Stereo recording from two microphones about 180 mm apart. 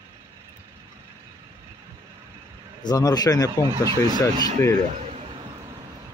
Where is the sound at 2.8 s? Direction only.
20° left (ahead or behind).